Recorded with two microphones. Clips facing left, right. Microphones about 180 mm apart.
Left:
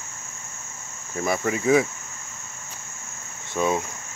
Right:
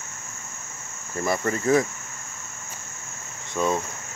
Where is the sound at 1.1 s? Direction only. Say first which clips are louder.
Left 1 dB; 5° left (ahead or behind).